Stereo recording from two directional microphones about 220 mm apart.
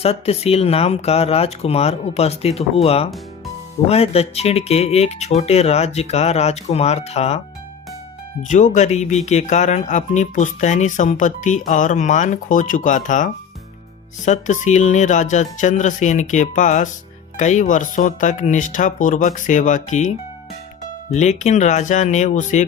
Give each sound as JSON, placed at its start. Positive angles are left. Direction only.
{"t": 0.0, "sound": "speech", "side_deg": 25}